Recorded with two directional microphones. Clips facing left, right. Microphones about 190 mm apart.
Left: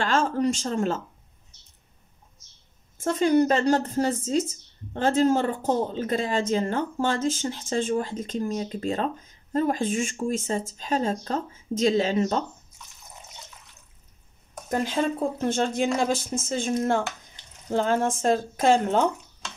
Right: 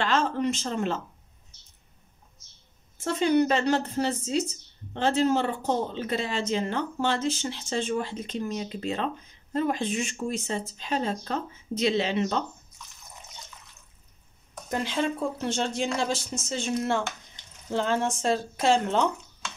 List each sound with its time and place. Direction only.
0.0 s speech: 45° left (ahead or behind)
3.0 s speech: 45° left (ahead or behind)
15.4 s speech: 55° left (ahead or behind)